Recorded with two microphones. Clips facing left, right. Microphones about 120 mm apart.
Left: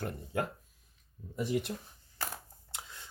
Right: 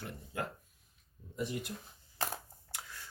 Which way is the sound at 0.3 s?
75° left (ahead or behind).